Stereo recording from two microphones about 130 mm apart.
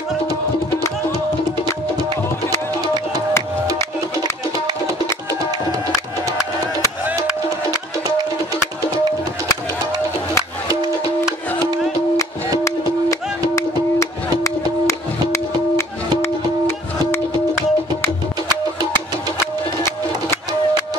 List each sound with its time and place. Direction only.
12.2 s music: 25° left (ahead or behind)